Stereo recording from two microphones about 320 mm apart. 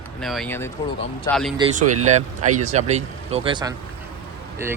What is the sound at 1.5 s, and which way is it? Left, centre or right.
Speech, centre.